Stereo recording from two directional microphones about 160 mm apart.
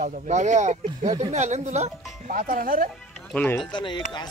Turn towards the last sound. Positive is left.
turn(degrees=30)  # may be behind; listen again after turning